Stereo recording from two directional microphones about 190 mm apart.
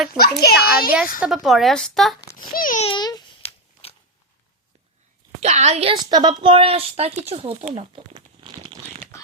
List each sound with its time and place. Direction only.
0.1 s a woman's voice: 5° right (ahead or behind)
0.6 s a child's voice: 50° left (ahead or behind)
1.2 s a woman's voice: centre (ahead or behind)
2.5 s a child's voice: 45° left (ahead or behind)
2.8 s a sound: 25° left (ahead or behind)
5.4 s a woman's voice: 35° right (ahead or behind)
7.8 s crumpling: 30° right (ahead or behind)